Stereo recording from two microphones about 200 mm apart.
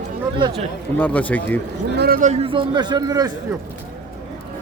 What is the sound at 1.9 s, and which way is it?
Speech, 55° right (ahead or behind).